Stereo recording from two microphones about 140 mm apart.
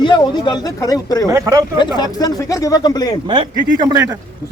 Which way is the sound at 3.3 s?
30° right (ahead or behind).